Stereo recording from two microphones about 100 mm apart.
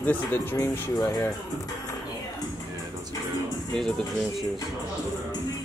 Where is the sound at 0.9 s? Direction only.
35° left (ahead or behind).